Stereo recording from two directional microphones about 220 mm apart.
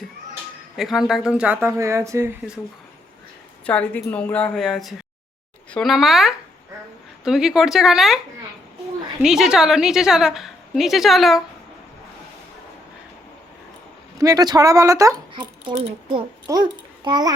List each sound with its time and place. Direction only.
0.8 s speech: centre (ahead or behind)
3.7 s a woman's voice: 5° left (ahead or behind)
9.2 s a woman's voice: centre (ahead or behind)
14.2 s speech: 15° right (ahead or behind)